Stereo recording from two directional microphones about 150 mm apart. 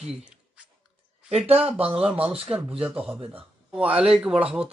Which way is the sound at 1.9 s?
10° right (ahead or behind).